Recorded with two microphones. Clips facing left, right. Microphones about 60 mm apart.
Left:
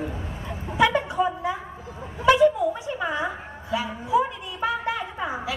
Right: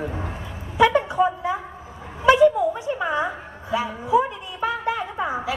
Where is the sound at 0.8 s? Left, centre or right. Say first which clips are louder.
Right 3 dB; right.